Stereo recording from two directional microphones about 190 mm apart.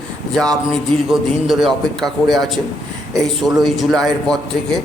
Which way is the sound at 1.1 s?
Centre (ahead or behind).